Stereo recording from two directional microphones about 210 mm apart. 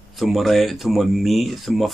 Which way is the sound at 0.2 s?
Centre (ahead or behind).